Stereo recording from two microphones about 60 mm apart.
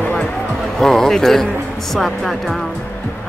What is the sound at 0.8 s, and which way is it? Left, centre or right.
Speech, centre.